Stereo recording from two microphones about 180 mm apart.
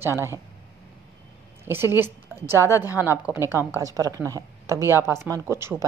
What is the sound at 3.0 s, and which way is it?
A woman's voice, 10° right (ahead or behind).